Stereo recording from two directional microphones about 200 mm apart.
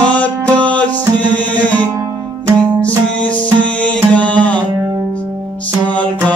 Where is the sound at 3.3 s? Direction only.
5° left (ahead or behind).